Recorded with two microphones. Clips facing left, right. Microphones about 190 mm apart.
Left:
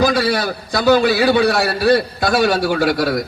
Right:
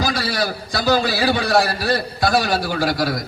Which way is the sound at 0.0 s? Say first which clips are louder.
Left 6 dB; 55° left (ahead or behind).